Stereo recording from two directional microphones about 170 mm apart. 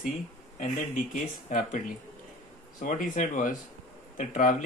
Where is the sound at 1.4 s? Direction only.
50° left (ahead or behind).